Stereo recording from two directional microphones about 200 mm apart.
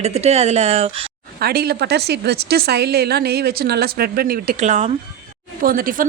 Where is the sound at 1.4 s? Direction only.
50° right (ahead or behind).